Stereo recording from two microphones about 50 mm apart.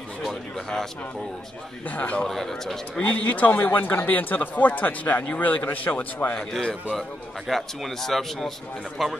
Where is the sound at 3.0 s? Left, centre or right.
Left.